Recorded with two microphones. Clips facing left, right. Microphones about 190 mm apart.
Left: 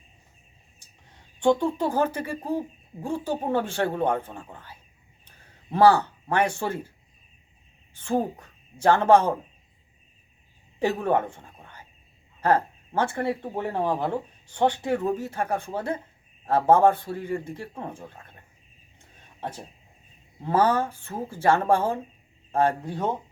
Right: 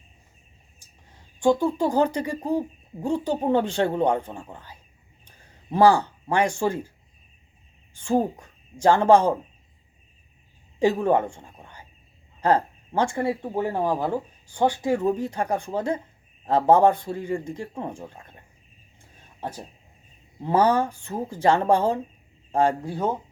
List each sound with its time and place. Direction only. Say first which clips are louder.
1.4 s speech: right 1 dB; 10° right (ahead or behind)
7.9 s a woman's voice: right 3 dB; 10° right (ahead or behind)
10.8 s speech: right 3 dB; 15° right (ahead or behind)
20.4 s speech: right 2 dB; 15° right (ahead or behind)